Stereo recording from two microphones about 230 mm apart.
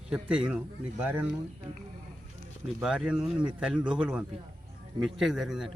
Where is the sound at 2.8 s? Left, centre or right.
Centre.